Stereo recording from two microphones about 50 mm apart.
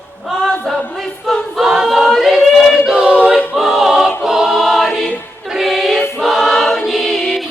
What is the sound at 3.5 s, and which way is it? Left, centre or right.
Choir, centre.